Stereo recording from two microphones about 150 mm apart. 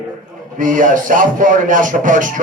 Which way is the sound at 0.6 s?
60° right (ahead or behind).